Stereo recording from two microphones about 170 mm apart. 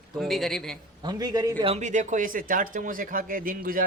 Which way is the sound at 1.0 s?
25° right (ahead or behind).